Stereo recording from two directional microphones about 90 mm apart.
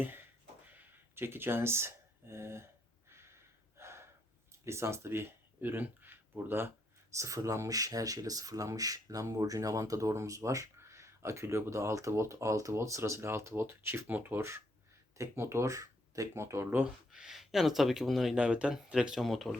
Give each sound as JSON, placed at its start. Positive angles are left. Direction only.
{"t": 0.0, "sound": "a sound", "side_deg": -20}
{"t": 0.8, "sound": "speech", "side_deg": -25}
{"t": 3.8, "sound": "gasp", "side_deg": -30}
{"t": 4.6, "sound": "speech", "side_deg": -30}
{"t": 7.1, "sound": "speech", "side_deg": -35}
{"t": 16.8, "sound": "speech", "side_deg": -5}
{"t": 18.3, "sound": "speech", "side_deg": -10}